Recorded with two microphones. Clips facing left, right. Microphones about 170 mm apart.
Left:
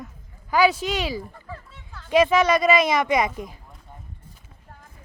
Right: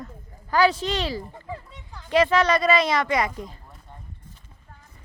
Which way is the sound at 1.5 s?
15° right (ahead or behind).